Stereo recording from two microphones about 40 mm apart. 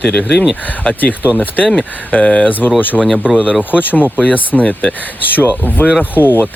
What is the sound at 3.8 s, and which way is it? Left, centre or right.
Speech, left.